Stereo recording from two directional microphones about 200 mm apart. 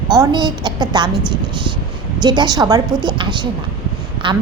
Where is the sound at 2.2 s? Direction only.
20° right (ahead or behind).